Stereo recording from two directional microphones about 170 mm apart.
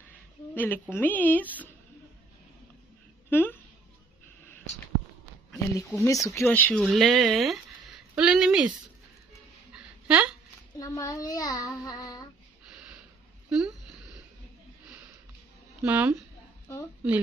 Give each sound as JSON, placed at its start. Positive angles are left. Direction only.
{"t": 0.6, "sound": "a woman's voice", "side_deg": 10}
{"t": 3.3, "sound": "a woman's voice", "side_deg": 10}
{"t": 5.5, "sound": "a child's voice", "side_deg": 20}
{"t": 6.8, "sound": "speech", "side_deg": 0}
{"t": 10.0, "sound": "speech", "side_deg": -5}
{"t": 10.8, "sound": "a child's voice", "side_deg": 20}
{"t": 13.5, "sound": "speech", "side_deg": -5}
{"t": 15.8, "sound": "a woman's voice", "side_deg": -10}